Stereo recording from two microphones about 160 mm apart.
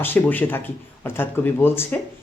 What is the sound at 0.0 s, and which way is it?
Speech, 10° left (ahead or behind).